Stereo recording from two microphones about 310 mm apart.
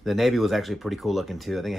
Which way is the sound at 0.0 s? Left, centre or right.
Centre.